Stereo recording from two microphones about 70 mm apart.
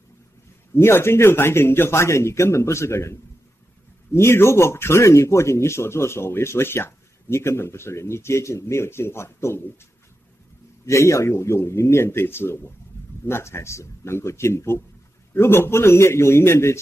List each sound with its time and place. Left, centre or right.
0.7 s speech: left
10.9 s speech: left
12.9 s a sound: left
13.3 s speech: left